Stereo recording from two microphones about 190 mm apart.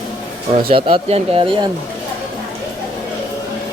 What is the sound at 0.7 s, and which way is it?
Speech, 25° right (ahead or behind).